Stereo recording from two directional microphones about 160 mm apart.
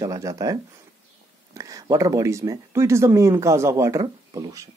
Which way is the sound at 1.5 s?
20° right (ahead or behind).